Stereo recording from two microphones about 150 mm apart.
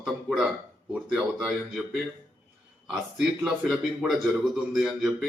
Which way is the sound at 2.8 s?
5° right (ahead or behind).